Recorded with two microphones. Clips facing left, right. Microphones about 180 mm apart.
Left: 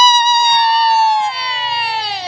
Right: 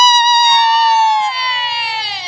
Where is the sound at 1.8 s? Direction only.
55° left (ahead or behind).